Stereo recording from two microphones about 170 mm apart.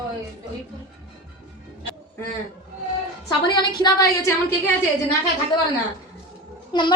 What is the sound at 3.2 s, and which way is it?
Speech, 25° left (ahead or behind).